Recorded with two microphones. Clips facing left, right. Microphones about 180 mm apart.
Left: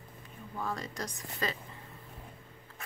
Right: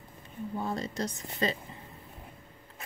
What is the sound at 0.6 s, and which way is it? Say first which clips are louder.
Speech: right 4 dB; 25° right (ahead or behind).